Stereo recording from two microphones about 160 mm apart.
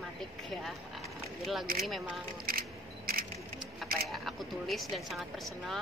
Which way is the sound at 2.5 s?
70° right (ahead or behind).